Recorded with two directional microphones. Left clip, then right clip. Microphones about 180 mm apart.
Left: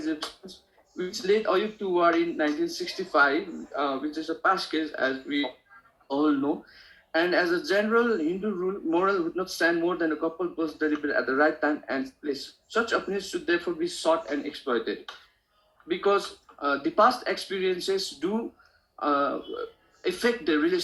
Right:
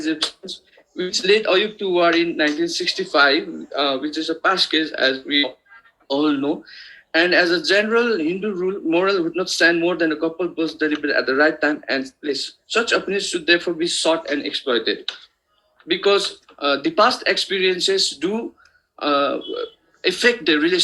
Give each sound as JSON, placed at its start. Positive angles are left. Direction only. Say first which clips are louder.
{"t": 0.1, "sound": "speech", "louder": "right 10 dB", "side_deg": -30}